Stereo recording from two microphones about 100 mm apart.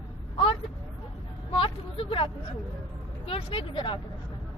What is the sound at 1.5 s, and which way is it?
Vehicle, 65° left (ahead or behind).